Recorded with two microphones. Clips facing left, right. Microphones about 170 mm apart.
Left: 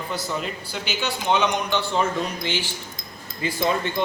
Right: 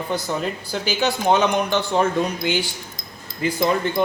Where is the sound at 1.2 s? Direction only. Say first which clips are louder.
Right 3 dB; 45° right (ahead or behind).